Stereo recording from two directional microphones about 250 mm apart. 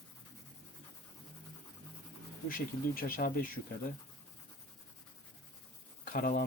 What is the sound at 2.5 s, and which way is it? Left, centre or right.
Speech, left.